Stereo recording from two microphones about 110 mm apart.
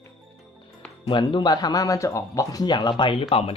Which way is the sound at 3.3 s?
60° left (ahead or behind).